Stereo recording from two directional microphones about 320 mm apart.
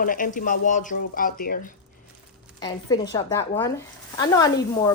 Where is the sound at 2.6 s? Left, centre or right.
Centre.